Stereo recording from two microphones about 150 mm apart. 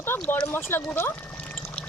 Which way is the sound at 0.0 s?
15° left (ahead or behind).